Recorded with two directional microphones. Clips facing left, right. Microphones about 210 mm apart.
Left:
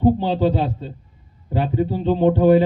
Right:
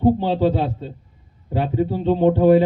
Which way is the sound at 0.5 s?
Centre (ahead or behind).